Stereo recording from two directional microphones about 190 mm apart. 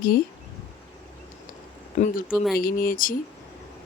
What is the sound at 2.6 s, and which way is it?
Speech, 50° left (ahead or behind).